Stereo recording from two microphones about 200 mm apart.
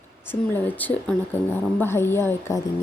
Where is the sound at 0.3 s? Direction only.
10° left (ahead or behind).